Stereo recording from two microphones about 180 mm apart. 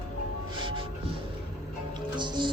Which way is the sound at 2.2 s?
25° right (ahead or behind).